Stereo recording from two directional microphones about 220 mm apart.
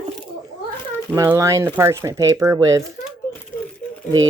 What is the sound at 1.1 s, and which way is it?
Speech, 10° right (ahead or behind).